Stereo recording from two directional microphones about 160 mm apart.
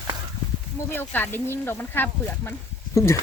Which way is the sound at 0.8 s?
15° left (ahead or behind).